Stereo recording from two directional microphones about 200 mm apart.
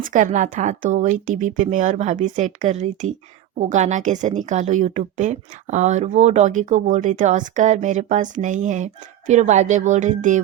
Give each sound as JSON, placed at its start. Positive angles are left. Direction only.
{"t": 0.0, "sound": "a woman's voice", "side_deg": -40}